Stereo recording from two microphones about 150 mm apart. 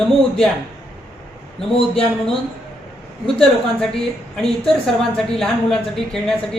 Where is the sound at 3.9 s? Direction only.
5° left (ahead or behind).